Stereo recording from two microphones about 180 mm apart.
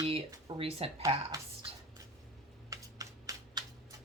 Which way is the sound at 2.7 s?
20° right (ahead or behind).